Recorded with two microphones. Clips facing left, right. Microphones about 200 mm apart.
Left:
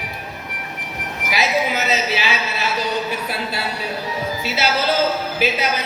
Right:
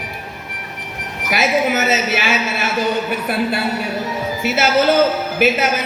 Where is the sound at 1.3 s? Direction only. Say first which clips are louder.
Right 4 dB; 50° right (ahead or behind).